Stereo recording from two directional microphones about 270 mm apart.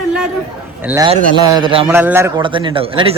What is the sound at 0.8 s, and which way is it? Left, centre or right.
Speech, centre.